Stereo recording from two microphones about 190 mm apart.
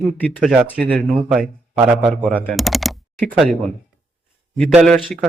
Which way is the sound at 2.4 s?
Centre (ahead or behind).